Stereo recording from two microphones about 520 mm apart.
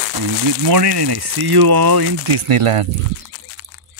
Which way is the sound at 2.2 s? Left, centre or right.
Right.